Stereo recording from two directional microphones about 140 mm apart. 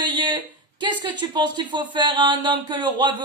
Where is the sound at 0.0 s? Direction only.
35° right (ahead or behind).